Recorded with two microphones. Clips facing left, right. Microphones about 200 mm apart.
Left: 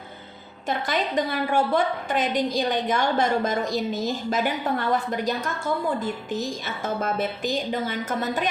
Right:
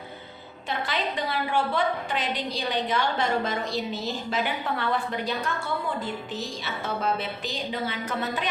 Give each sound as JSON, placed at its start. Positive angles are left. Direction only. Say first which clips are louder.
{"t": 0.7, "sound": "a woman's voice", "louder": "left 4 dB", "side_deg": 45}